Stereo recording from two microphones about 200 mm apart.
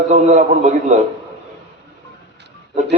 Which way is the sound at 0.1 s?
35° right (ahead or behind).